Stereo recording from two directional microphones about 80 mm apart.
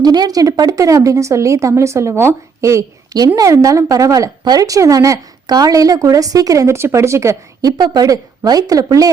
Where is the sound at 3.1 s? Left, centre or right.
Right.